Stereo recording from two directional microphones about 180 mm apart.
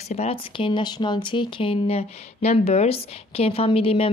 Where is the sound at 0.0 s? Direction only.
35° left (ahead or behind).